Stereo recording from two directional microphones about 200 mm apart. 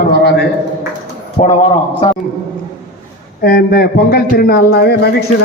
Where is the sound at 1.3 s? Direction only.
35° left (ahead or behind).